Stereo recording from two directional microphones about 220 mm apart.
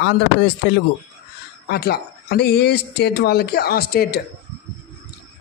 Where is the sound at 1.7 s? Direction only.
45° left (ahead or behind).